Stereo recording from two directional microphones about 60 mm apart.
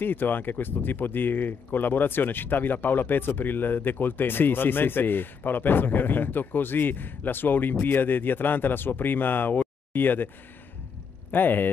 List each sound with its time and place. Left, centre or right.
0.0 s speech: left
11.3 s speech: left